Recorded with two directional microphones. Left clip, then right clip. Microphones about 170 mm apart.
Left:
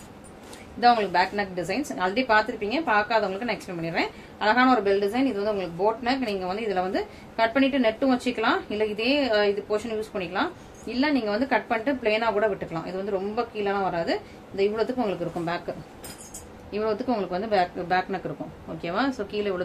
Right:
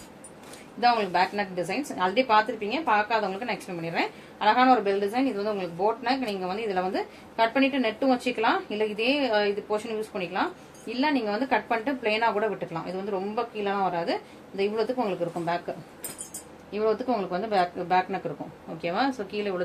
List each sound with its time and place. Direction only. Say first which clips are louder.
0.7 s a woman's voice: left 2 dB; 20° left (ahead or behind)
16.7 s a woman's voice: right 1 dB; 10° left (ahead or behind)